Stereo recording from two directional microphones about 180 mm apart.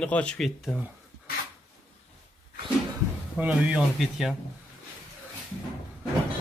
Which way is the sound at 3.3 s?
5° right (ahead or behind).